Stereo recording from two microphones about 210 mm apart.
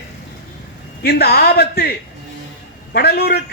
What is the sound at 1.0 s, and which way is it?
Speech, 50° left (ahead or behind).